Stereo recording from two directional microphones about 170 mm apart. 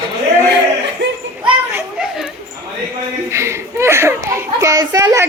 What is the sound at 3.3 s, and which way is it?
A child's voice, 15° right (ahead or behind).